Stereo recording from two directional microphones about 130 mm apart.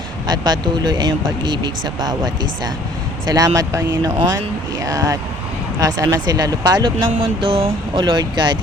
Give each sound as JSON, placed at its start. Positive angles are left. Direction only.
{"t": 0.3, "sound": "speech", "side_deg": -30}
{"t": 7.2, "sound": "speech", "side_deg": -40}